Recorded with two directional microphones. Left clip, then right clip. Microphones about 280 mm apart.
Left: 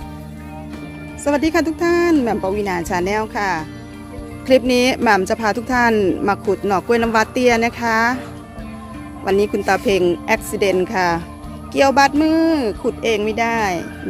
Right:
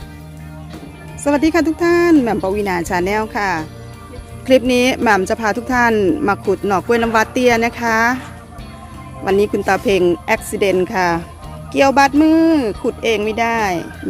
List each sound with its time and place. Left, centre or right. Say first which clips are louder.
1.2 s speech: right 2 dB; centre
9.2 s speech: right 2 dB; centre